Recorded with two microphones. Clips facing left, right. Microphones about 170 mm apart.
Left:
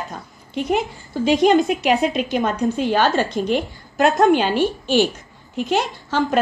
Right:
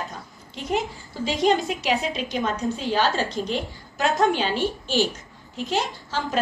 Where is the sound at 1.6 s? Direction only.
55° left (ahead or behind).